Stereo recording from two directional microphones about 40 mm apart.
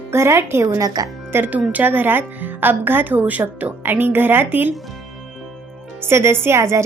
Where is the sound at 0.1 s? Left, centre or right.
Right.